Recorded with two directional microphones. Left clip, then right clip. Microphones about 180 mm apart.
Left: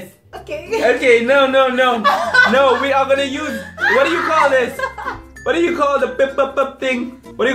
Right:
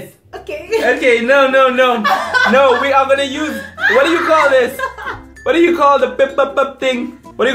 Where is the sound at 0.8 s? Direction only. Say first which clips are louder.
Even; 20° right (ahead or behind).